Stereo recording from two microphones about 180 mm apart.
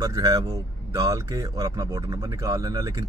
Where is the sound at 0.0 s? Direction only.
20° right (ahead or behind).